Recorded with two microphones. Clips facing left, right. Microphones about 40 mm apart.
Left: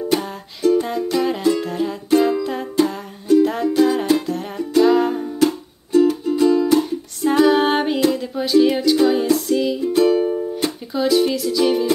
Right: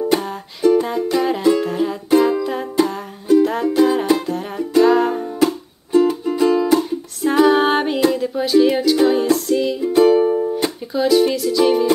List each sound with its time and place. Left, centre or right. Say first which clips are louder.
0.1 s music: right 2 dB; centre
5.3 s music: even; centre
6.8 s music: even; centre
9.8 s music: right 5 dB; centre